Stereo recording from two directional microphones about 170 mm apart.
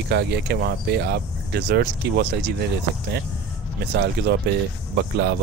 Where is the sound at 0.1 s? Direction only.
80° right.